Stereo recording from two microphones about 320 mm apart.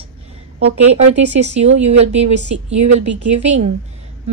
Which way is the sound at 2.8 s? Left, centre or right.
Right.